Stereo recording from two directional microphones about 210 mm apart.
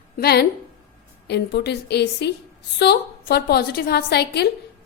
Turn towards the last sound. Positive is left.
turn(degrees=50)  # may be behind; listen again after turning